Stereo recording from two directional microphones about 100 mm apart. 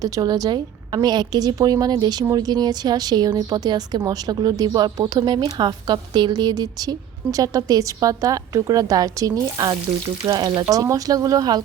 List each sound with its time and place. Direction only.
0.0 s a woman's voice: 40° right (ahead or behind)